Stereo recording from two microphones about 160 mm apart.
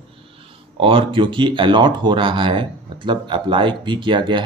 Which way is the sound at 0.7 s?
35° right (ahead or behind).